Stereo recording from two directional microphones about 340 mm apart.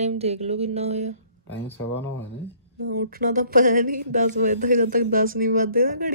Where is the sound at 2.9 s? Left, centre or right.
Right.